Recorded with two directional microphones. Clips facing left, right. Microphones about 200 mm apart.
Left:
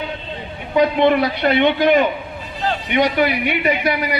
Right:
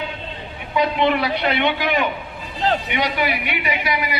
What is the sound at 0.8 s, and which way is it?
A man's voice, 45° left (ahead or behind).